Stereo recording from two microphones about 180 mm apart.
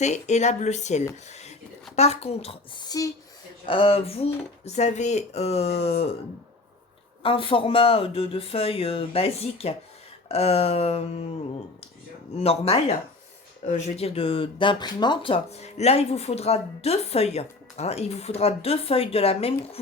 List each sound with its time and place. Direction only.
0.0 s speech: 40° left (ahead or behind)
7.2 s speech: 30° left (ahead or behind)
12.4 s speech: 35° left (ahead or behind)